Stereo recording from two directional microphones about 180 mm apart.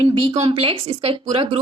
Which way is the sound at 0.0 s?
30° right (ahead or behind).